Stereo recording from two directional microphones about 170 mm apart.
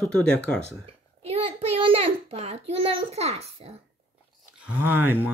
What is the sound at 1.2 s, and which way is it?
Child singing, 35° right (ahead or behind).